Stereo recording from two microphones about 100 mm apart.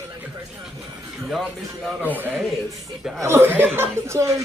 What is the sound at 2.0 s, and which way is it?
A man's voice, 15° right (ahead or behind).